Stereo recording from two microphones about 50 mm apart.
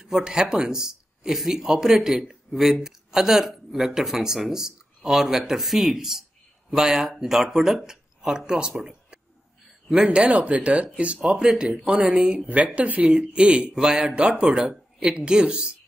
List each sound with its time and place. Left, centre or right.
0.0 s speech: centre
8.7 s a sound: centre
10.1 s speech: right
11.2 s speech: centre
12.4 s speech: right